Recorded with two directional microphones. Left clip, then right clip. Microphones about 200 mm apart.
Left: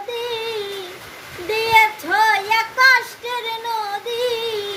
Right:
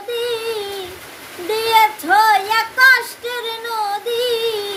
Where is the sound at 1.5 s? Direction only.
15° right (ahead or behind).